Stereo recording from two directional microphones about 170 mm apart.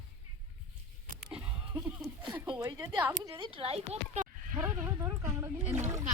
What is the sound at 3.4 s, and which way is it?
Speech, 35° right (ahead or behind).